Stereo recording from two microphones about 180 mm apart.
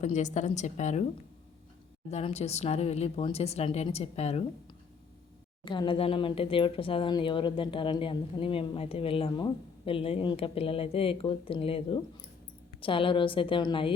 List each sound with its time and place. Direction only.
0.0 s speech: 40° left (ahead or behind)
5.6 s a woman's voice: 25° left (ahead or behind)